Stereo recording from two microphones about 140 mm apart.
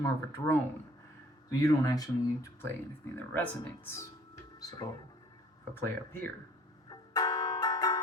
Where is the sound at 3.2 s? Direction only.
15° left (ahead or behind).